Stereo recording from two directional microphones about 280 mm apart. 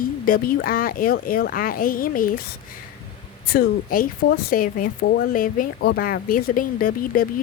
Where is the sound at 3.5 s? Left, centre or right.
Left.